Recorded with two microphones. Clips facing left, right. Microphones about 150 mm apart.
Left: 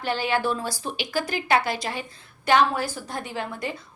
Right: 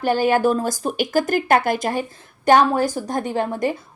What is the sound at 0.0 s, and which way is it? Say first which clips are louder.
A woman's voice: right 8 dB; 45° right (ahead or behind).